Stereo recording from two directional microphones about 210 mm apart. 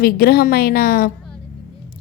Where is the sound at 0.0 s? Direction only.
45° left (ahead or behind).